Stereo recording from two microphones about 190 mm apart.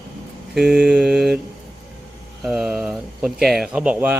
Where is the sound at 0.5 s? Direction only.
5° right (ahead or behind).